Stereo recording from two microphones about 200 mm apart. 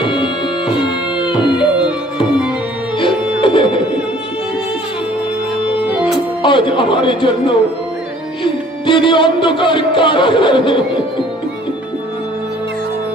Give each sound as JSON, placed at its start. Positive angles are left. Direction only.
{"t": 0.0, "sound": "music", "side_deg": 25}
{"t": 3.0, "sound": "music", "side_deg": 25}
{"t": 6.4, "sound": "speech", "side_deg": 25}
{"t": 8.9, "sound": "speech", "side_deg": 25}